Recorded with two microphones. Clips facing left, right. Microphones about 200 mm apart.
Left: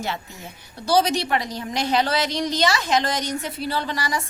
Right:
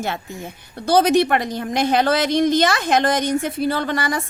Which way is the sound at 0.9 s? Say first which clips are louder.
Right 5 dB; 55° right (ahead or behind).